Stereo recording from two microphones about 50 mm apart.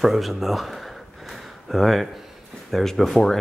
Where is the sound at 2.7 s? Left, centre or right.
Centre.